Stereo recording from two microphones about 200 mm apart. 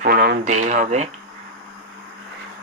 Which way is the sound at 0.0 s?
50° right (ahead or behind).